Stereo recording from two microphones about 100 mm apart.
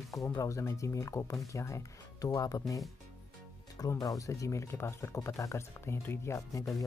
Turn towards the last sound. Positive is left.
turn(degrees=35)  # may be behind; listen again after turning